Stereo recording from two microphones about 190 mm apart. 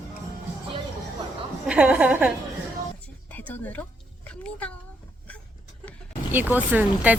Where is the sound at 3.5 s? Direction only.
10° left (ahead or behind).